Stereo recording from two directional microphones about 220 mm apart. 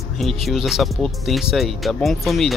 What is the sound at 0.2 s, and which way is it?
Speech, centre (ahead or behind).